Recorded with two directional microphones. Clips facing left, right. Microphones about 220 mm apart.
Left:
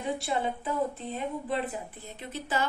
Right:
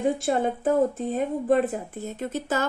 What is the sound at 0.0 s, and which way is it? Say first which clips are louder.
Speech: right 7 dB; 45° right (ahead or behind).